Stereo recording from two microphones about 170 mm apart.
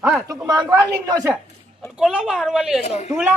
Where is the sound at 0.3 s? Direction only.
20° right (ahead or behind).